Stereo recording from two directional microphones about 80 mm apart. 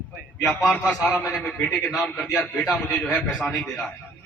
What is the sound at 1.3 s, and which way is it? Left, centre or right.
Speech, centre.